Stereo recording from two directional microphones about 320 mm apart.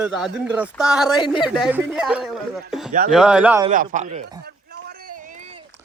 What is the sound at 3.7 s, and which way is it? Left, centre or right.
Speech, right.